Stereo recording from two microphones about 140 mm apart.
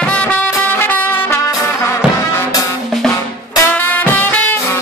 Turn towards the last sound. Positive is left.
turn(degrees=15)  # may be behind; listen again after turning